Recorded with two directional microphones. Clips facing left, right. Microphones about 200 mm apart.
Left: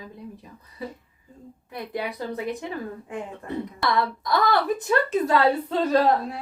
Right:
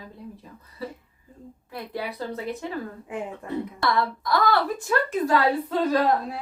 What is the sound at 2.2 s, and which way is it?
Speech, 15° left (ahead or behind).